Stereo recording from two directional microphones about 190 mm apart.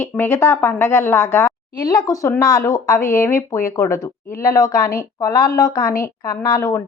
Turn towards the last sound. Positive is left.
turn(degrees=15)  # may be behind; listen again after turning